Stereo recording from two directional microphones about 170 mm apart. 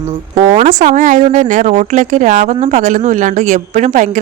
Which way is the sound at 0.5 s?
45° right (ahead or behind).